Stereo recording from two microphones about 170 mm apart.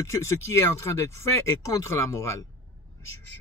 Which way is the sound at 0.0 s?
15° left (ahead or behind).